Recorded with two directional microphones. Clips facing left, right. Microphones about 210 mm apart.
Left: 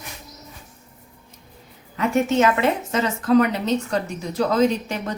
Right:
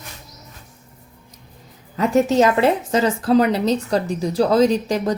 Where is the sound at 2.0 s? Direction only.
35° right (ahead or behind).